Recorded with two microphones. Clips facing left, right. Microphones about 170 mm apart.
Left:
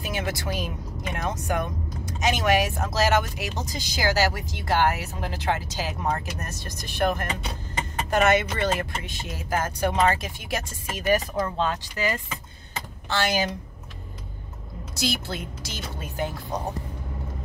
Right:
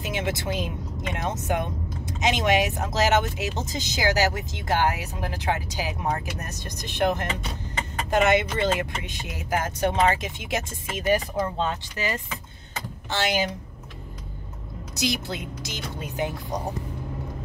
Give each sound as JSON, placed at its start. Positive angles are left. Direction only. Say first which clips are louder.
{"t": 0.0, "sound": "speech", "louder": "right 1 dB", "side_deg": -20}
{"t": 13.1, "sound": "speech", "louder": "even", "side_deg": -20}
{"t": 15.0, "sound": "speech", "louder": "right 1 dB", "side_deg": -15}